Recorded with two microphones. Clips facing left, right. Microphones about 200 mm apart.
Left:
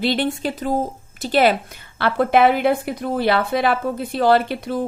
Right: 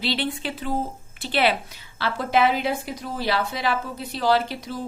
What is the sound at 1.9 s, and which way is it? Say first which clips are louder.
Speech: left 6 dB; 60° left (ahead or behind).